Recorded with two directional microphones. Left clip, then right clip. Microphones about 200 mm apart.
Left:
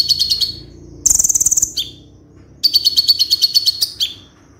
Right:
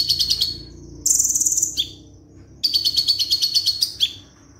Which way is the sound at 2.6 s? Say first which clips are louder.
Left 6 dB; 20° left (ahead or behind).